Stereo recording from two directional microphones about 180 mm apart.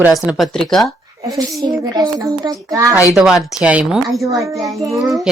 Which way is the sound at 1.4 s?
20° right (ahead or behind).